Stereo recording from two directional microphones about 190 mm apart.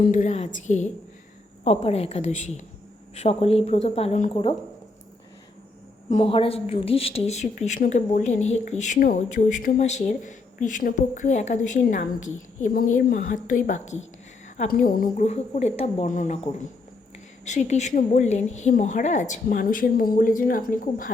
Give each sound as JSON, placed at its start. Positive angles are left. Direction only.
{"t": 0.0, "sound": "a woman's voice", "side_deg": 45}
{"t": 6.1, "sound": "a woman's voice", "side_deg": 30}
{"t": 15.2, "sound": "a woman's voice", "side_deg": 35}